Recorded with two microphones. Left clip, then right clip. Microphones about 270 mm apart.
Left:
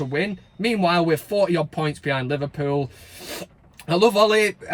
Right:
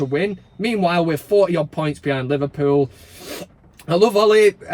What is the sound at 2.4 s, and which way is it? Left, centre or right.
Speech, left.